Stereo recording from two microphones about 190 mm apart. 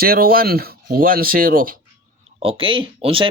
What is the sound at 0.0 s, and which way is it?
Speech, 50° right (ahead or behind).